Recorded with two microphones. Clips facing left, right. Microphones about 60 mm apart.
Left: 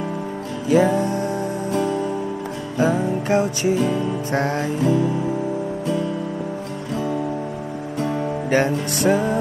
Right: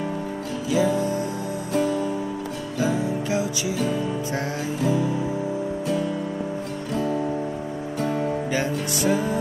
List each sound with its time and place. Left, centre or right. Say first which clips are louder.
0.7 s music: left 5 dB; left
2.8 s music: left 4 dB; left
8.5 s music: left 6 dB; left